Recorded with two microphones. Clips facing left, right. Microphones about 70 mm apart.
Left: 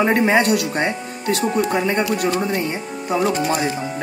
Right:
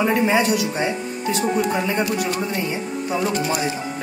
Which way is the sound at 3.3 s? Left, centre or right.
Left.